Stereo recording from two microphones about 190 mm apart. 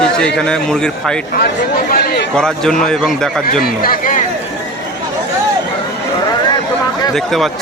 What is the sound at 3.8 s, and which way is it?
Speech, 45° left (ahead or behind).